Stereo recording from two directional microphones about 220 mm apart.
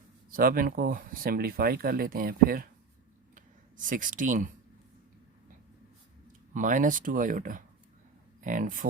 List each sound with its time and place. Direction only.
0.3 s speech: 40° right (ahead or behind)
6.5 s speech: 35° right (ahead or behind)